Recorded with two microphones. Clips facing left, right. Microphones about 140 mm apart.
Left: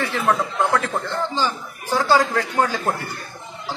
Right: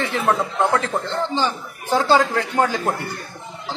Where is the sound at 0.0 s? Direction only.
15° right (ahead or behind).